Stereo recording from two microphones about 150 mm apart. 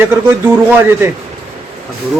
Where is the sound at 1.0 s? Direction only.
15° right (ahead or behind).